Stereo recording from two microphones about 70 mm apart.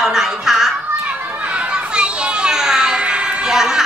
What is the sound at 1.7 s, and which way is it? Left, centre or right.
Children playing, centre.